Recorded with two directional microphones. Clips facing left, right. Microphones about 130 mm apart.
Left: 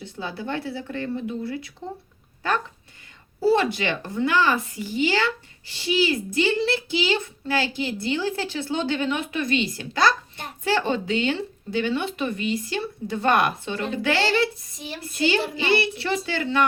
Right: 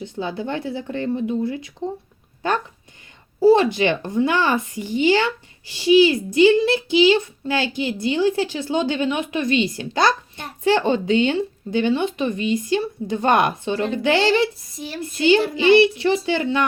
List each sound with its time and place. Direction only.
0.0 s speech: 20° right (ahead or behind)
3.4 s speech: 20° right (ahead or behind)